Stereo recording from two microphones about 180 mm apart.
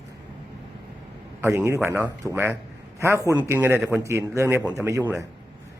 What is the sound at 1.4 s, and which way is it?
A man's voice, 15° right (ahead or behind).